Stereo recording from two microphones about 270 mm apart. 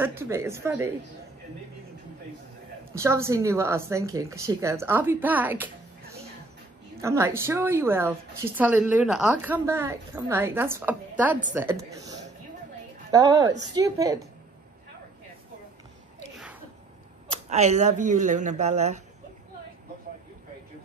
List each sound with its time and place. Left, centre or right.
0.0 s speech: centre
2.8 s speech: centre
7.0 s speech: centre
17.5 s speech: right